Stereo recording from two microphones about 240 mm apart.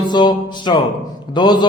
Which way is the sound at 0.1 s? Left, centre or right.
Centre.